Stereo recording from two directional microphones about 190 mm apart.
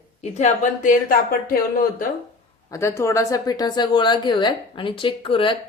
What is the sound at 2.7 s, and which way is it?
A woman's voice, 15° left (ahead or behind).